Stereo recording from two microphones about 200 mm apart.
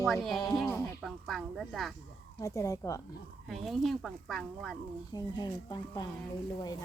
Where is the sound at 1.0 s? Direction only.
Centre (ahead or behind).